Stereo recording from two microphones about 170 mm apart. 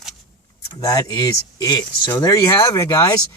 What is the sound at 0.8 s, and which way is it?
Speech, 20° left (ahead or behind).